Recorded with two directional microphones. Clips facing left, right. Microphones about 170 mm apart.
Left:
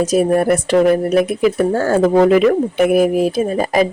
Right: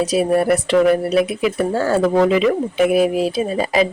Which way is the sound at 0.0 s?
50° left (ahead or behind).